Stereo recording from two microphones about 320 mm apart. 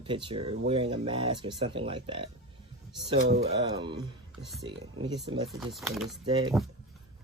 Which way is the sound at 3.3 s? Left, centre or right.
Right.